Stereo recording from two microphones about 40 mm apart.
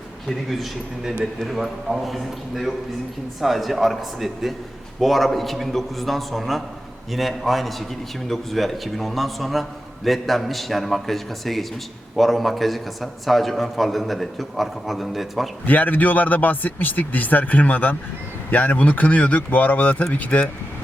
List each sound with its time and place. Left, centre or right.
0.3 s a man's voice: centre
15.6 s speech: left